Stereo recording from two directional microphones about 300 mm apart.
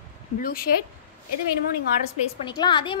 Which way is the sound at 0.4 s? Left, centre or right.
Left.